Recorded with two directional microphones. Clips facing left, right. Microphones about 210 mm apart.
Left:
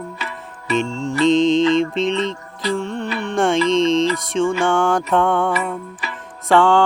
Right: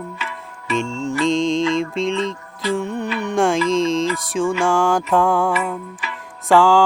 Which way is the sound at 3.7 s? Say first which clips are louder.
Left 2 dB; centre (ahead or behind).